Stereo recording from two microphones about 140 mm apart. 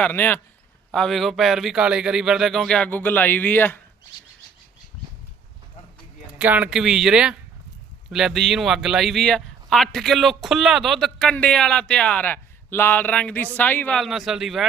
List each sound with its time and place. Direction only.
0.0 s a man's voice: 10° left (ahead or behind)
6.4 s speech: 10° right (ahead or behind); by 14.0 s 10° left (ahead or behind)
14.0 s speech: centre (ahead or behind)